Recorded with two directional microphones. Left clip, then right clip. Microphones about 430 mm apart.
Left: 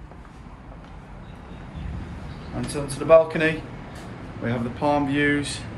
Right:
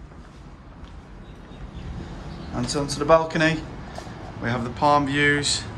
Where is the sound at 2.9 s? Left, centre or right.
Centre.